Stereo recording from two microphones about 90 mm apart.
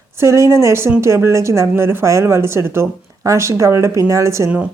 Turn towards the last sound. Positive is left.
turn(degrees=-35)  # may be behind; listen again after turning